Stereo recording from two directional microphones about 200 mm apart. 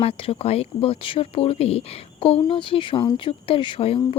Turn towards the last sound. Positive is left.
turn(degrees=25)  # may be behind; listen again after turning